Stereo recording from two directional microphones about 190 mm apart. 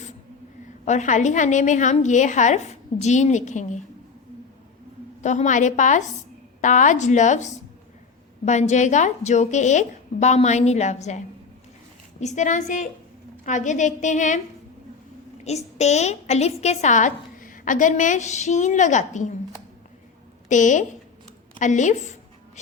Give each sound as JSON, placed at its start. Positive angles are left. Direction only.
{"t": 0.9, "sound": "a woman's voice", "side_deg": 40}
{"t": 5.2, "sound": "a woman's voice", "side_deg": 40}
{"t": 12.2, "sound": "a woman's voice", "side_deg": 40}
{"t": 15.4, "sound": "a woman's voice", "side_deg": 35}
{"t": 20.5, "sound": "a woman's voice", "side_deg": 40}